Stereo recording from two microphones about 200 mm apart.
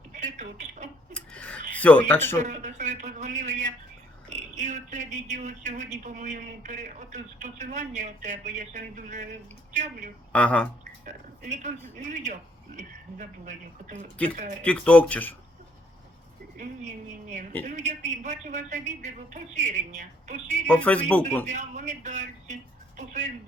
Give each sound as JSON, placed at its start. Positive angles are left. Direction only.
{"t": 0.1, "sound": "speech", "side_deg": -35}
{"t": 1.1, "sound": "a sound", "side_deg": 5}
{"t": 1.8, "sound": "speech", "side_deg": 10}
{"t": 2.4, "sound": "a sound", "side_deg": -35}
{"t": 4.5, "sound": "speech", "side_deg": -35}
{"t": 10.3, "sound": "speech", "side_deg": 5}
{"t": 11.0, "sound": "speech", "side_deg": -40}
{"t": 14.6, "sound": "speech", "side_deg": 5}
{"t": 16.6, "sound": "speech", "side_deg": -40}
{"t": 20.7, "sound": "speech", "side_deg": 5}
{"t": 21.4, "sound": "speech", "side_deg": -35}